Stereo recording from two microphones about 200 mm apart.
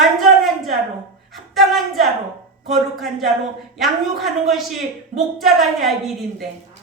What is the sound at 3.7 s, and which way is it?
A woman's voice, centre (ahead or behind).